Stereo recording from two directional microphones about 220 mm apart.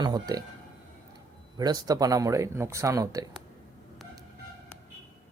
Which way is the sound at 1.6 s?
20° right (ahead or behind).